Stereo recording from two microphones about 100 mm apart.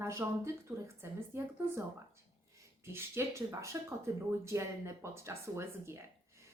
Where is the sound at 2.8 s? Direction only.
25° right (ahead or behind).